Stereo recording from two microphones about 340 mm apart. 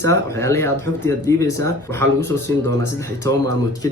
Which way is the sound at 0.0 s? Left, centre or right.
Centre.